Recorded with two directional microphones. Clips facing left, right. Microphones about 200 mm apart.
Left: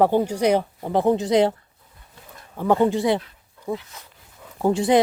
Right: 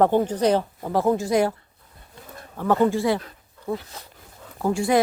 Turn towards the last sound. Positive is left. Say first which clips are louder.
# left 3 dB
turn(degrees=20)  # may be behind; listen again after turning